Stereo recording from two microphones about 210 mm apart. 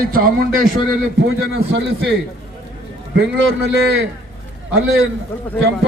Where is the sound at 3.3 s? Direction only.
65° right (ahead or behind).